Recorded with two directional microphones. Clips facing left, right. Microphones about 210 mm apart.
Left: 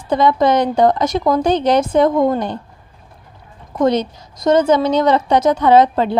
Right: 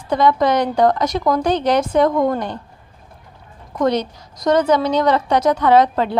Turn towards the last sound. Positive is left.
turn(degrees=25)  # may be behind; listen again after turning